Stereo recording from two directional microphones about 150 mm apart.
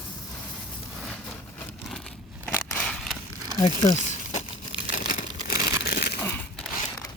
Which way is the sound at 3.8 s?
50° left (ahead or behind).